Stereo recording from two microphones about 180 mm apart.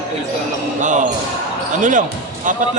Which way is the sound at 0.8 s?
45° right (ahead or behind).